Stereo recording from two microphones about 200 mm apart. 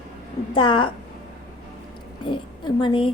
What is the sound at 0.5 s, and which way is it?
Speech, 25° left (ahead or behind).